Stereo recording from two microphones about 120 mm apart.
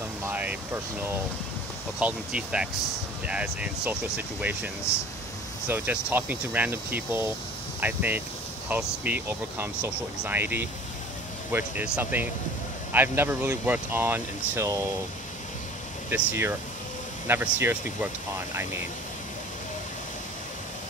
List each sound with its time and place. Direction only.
0.2 s vehicle: 15° right (ahead or behind)
2.0 s speech: 10° right (ahead or behind)
4.9 s speech: 25° left (ahead or behind)
5.7 s speech: 15° right (ahead or behind)
16.1 s speech: 20° right (ahead or behind)